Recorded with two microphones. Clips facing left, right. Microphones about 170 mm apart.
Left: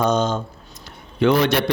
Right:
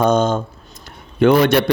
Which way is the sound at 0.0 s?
50° right (ahead or behind).